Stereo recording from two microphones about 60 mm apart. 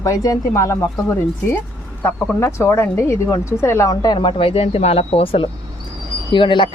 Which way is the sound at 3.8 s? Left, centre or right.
Left.